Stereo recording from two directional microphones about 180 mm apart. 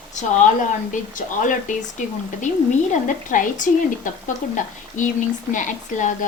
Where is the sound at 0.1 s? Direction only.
40° left (ahead or behind).